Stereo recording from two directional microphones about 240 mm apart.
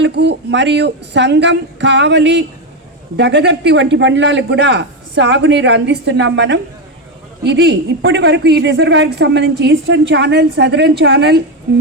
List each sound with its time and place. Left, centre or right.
0.0 s speech: right